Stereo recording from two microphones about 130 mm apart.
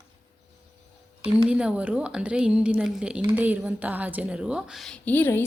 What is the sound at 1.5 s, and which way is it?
A woman's voice, 10° right (ahead or behind).